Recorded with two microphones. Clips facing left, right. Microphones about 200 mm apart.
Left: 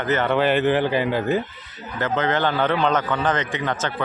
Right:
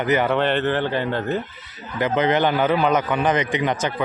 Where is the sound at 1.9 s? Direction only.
15° right (ahead or behind).